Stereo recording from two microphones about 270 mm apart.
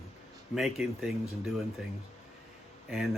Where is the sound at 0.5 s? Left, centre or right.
Centre.